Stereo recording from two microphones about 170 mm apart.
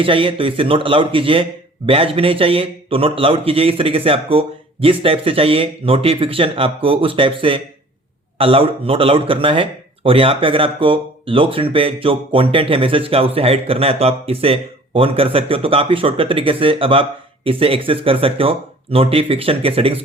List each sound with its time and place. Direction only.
0.0 s speech: 30° right (ahead or behind)